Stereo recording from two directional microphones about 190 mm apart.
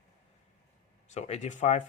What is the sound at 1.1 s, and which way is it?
Speech, 35° left (ahead or behind).